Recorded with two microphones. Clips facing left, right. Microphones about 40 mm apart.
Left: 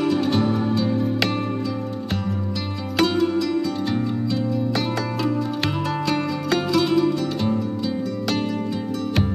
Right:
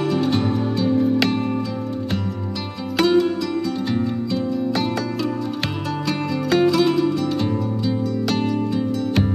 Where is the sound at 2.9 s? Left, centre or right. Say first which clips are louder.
Right 2 dB; centre.